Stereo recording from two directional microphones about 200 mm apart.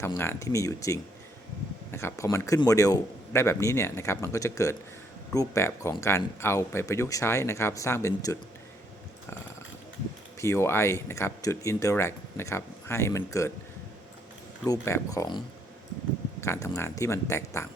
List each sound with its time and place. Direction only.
0.0 s speech: 10° left (ahead or behind)
10.4 s speech: 15° left (ahead or behind)
14.7 s speech: 15° left (ahead or behind)
16.4 s speech: 15° left (ahead or behind)